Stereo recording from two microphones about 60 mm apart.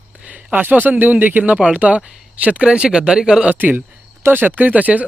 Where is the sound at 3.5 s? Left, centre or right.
Right.